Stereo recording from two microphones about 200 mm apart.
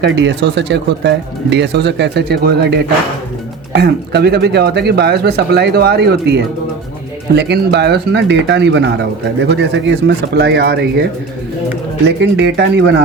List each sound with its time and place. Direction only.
0.0 s speech: 60° right (ahead or behind)